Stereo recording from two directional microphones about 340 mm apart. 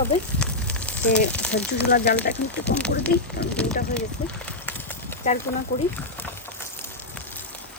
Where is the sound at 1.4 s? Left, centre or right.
Centre.